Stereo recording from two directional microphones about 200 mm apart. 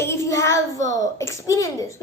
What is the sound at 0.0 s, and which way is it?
A woman's voice, 15° left (ahead or behind).